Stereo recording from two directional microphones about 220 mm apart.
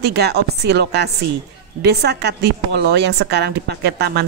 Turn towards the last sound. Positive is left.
turn(degrees=-50)  # may be behind; listen again after turning